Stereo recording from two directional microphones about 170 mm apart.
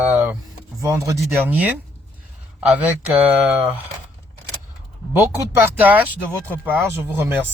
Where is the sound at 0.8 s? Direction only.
20° right (ahead or behind).